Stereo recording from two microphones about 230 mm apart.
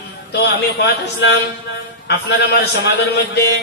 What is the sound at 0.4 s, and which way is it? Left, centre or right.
Speech, left.